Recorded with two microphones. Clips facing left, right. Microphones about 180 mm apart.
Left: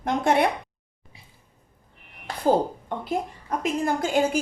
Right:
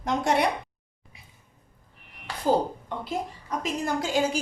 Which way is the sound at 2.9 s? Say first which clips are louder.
Left 4 dB; 50° left (ahead or behind).